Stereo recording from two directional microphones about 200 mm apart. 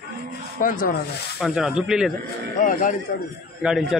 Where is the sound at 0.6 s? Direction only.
45° left (ahead or behind).